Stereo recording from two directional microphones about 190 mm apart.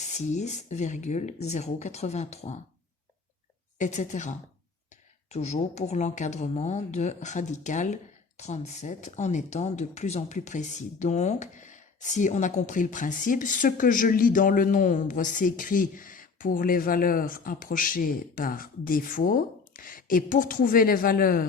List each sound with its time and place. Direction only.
0.3 s speech: 40° left (ahead or behind)
3.8 s speech: 40° left (ahead or behind)